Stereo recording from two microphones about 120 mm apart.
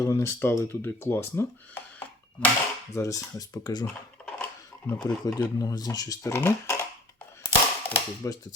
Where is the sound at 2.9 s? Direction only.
25° left (ahead or behind).